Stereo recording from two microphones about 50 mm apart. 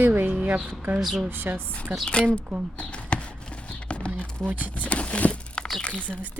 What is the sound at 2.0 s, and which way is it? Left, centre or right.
Speech, left.